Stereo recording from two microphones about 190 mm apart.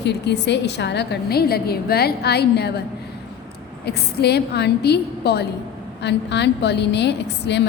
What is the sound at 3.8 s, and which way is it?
A woman's voice, 60° left (ahead or behind).